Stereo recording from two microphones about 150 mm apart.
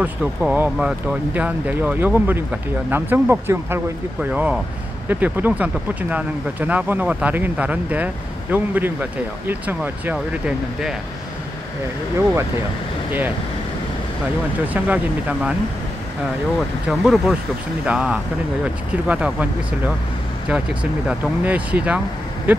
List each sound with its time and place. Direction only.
0.0 s speech: 5° right (ahead or behind)
14.7 s speech: 10° right (ahead or behind)
16.5 s speech: centre (ahead or behind)
20.4 s speech: 5° right (ahead or behind)
22.5 s quack: 10° right (ahead or behind)